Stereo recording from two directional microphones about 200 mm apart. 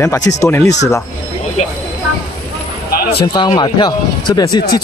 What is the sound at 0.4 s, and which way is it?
Speech, 10° left (ahead or behind).